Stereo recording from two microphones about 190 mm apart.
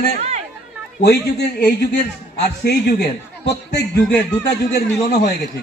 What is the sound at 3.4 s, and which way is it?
Speech, 65° left (ahead or behind).